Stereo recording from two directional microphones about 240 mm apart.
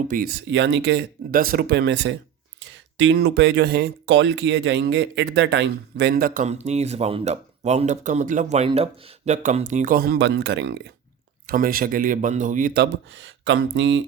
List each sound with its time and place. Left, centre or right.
0.1 s speech: right